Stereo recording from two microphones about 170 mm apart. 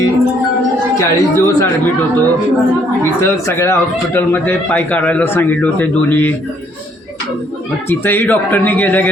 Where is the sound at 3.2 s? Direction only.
15° left (ahead or behind).